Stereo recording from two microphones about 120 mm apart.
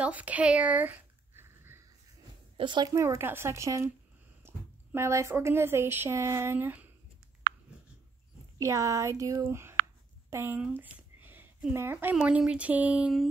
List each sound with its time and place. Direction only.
0.0 s a sound: 10° right (ahead or behind)
2.5 s speech: 40° right (ahead or behind)
2.9 s speech: 25° right (ahead or behind)
8.5 s speech: 25° right (ahead or behind)
10.8 s a sound: 15° right (ahead or behind)
11.7 s speech: 20° right (ahead or behind)